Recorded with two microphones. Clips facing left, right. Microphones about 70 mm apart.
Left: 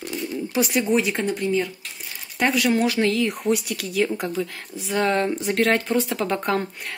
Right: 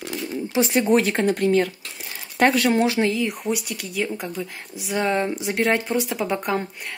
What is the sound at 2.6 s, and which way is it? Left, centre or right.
Speech, right.